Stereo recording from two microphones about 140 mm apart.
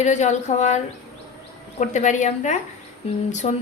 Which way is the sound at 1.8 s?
60° left (ahead or behind).